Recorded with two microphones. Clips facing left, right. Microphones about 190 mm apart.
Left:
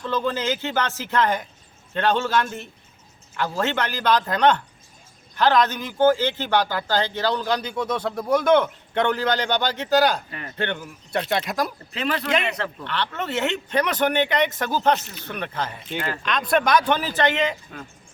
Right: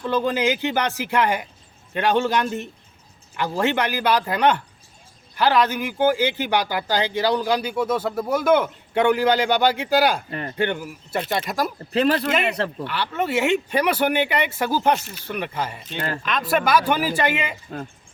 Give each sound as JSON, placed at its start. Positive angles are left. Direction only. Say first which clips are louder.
{"t": 0.0, "sound": "a man's voice", "louder": "right 3 dB", "side_deg": -10}
{"t": 11.9, "sound": "speech", "louder": "right 4 dB", "side_deg": -35}
{"t": 12.8, "sound": "a man's voice", "louder": "right 3 dB", "side_deg": -10}
{"t": 16.0, "sound": "speech", "louder": "right 1 dB", "side_deg": -40}
{"t": 16.2, "sound": "a man's voice", "louder": "left 1 dB", "side_deg": -5}
{"t": 17.7, "sound": "speech", "louder": "right 6 dB", "side_deg": -35}